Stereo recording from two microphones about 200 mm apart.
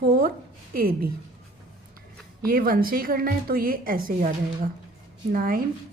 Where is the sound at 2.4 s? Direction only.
45° right (ahead or behind).